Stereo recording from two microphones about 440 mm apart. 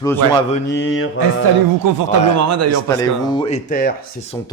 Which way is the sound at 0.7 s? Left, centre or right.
Left.